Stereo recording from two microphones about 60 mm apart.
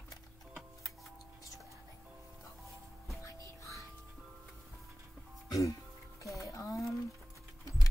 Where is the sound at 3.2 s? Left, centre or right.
Left.